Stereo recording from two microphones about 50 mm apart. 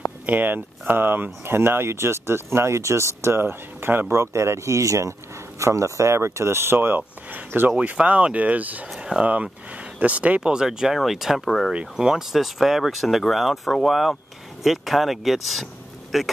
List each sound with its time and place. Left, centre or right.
0.3 s speech: right
4.1 s speech: right
7.0 s speech: right
7.7 s speech: right
8.9 s speech: centre
9.2 s speech: right
10.4 s speech: centre
11.7 s speech: centre